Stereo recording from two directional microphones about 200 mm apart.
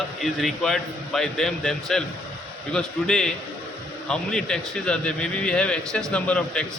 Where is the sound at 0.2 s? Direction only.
Centre (ahead or behind).